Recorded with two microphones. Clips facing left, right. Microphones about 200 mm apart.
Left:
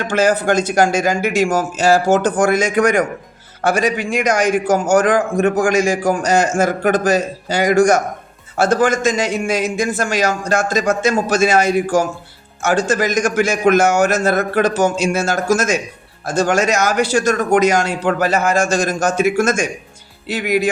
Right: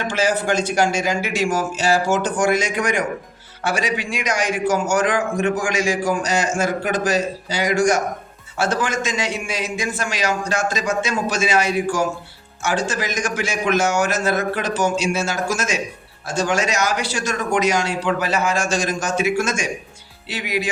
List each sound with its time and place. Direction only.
0.0 s a man's voice: 55° left (ahead or behind)